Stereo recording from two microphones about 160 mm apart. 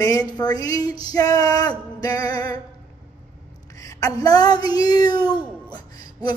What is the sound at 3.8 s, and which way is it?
Music, 20° left (ahead or behind).